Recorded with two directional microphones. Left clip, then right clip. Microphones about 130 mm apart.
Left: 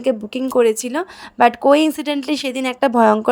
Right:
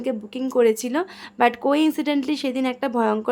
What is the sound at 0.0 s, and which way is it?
A woman's voice, 45° left (ahead or behind).